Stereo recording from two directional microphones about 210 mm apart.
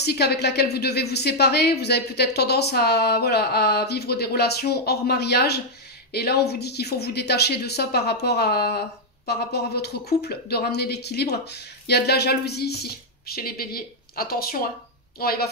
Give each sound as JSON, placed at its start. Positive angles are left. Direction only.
{"t": 0.0, "sound": "a woman's voice", "side_deg": 50}